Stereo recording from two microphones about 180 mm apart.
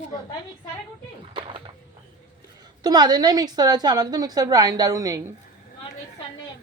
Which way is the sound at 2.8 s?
20° right (ahead or behind).